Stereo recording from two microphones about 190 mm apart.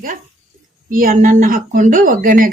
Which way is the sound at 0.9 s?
45° right (ahead or behind).